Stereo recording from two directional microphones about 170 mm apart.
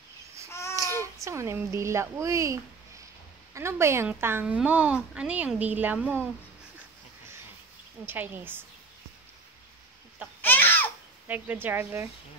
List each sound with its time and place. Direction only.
0.5 s babbling: 15° left (ahead or behind)
1.2 s a woman's voice: 15° right (ahead or behind)
8.0 s a woman's voice: 10° right (ahead or behind)
10.4 s a sound: 10° left (ahead or behind)
11.2 s a woman's voice: 10° right (ahead or behind)